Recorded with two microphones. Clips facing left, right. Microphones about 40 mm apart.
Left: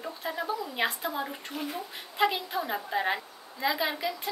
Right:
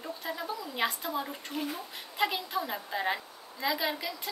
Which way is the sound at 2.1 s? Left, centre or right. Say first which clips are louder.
Left 3 dB; centre.